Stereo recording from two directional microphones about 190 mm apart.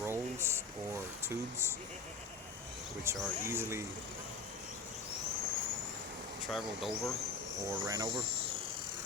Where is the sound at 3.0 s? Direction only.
15° right (ahead or behind).